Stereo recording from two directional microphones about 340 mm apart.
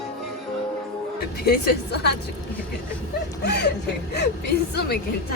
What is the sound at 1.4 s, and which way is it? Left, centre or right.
Speech, left.